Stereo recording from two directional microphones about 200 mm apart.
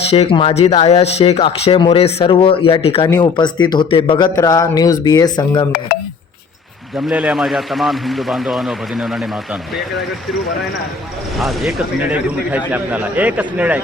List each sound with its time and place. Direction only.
0.1 s speech: 30° left (ahead or behind)
7.1 s a man's voice: 5° right (ahead or behind)
11.3 s a man's voice: centre (ahead or behind)